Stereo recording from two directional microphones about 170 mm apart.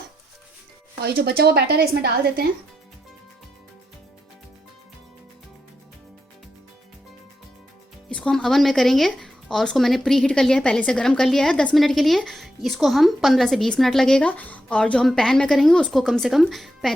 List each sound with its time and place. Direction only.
1.0 s a woman's voice: 70° right (ahead or behind)
8.1 s a woman's voice: 5° left (ahead or behind)